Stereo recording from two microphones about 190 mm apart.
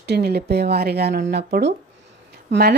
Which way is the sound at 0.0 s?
60° right (ahead or behind).